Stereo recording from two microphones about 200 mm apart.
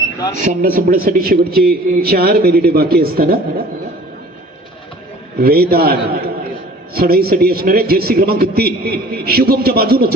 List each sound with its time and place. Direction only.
0.3 s a man's voice: 45° right (ahead or behind)
5.4 s a man's voice: 50° right (ahead or behind)